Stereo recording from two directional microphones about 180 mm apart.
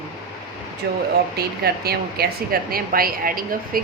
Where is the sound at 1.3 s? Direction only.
60° right (ahead or behind).